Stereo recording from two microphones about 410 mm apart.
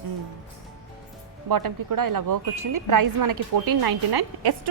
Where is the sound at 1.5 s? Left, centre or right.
Right.